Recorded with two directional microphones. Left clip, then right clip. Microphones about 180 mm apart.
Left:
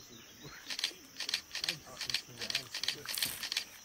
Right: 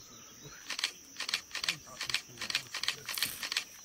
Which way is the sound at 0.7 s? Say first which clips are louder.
Right 2 dB; 35° right (ahead or behind).